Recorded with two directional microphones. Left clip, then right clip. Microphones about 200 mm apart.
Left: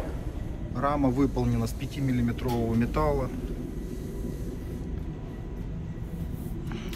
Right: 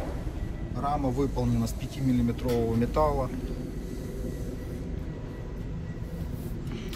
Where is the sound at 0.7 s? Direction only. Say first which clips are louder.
Left 3 dB; 15° right (ahead or behind).